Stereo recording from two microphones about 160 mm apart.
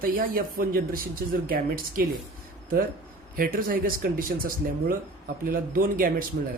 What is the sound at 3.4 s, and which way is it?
Speech, 65° right (ahead or behind).